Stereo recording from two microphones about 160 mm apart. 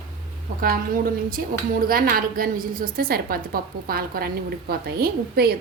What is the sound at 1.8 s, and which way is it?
A woman's voice, 65° right (ahead or behind).